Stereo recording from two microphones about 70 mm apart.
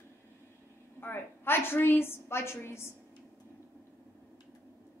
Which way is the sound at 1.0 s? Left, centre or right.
Left.